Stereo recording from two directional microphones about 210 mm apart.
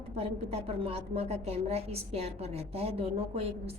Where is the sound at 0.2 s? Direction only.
30° right (ahead or behind).